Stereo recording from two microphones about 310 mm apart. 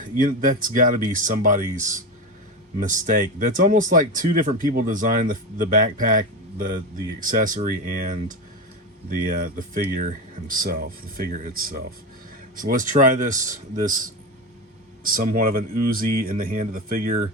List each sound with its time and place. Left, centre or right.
0.0 s speech: right
2.8 s speech: right